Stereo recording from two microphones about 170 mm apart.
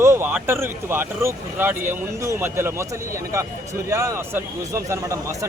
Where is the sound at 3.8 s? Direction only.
15° right (ahead or behind).